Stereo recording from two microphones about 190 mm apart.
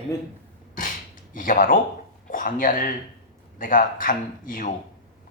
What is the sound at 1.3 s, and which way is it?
Speech, 45° left (ahead or behind).